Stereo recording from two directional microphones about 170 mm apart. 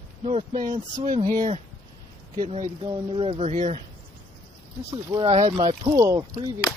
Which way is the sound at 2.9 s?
35° right (ahead or behind).